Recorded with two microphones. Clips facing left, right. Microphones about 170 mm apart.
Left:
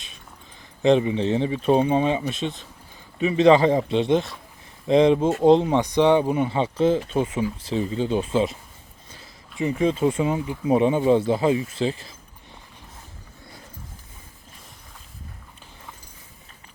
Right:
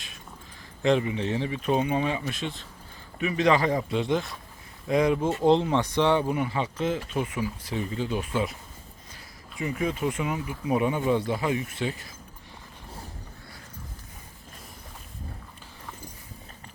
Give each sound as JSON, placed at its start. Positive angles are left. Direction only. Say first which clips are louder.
{"t": 0.8, "sound": "speech", "louder": "left 5 dB", "side_deg": 20}